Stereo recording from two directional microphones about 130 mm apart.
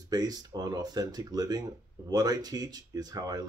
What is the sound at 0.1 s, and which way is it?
Speech, 30° right (ahead or behind).